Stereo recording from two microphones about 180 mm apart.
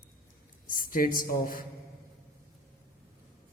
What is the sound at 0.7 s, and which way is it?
Speech, 50° left (ahead or behind).